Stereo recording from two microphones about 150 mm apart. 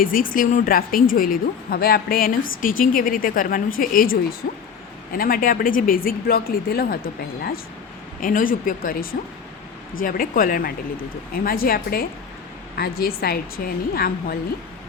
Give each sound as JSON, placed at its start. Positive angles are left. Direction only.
{"t": 0.0, "sound": "a woman's voice", "side_deg": 70}
{"t": 4.4, "sound": "a woman's voice", "side_deg": 90}
{"t": 5.1, "sound": "a woman's voice", "side_deg": 75}
{"t": 8.2, "sound": "a woman's voice", "side_deg": 65}